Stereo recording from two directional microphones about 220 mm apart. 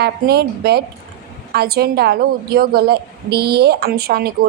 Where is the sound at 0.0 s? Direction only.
45° right (ahead or behind).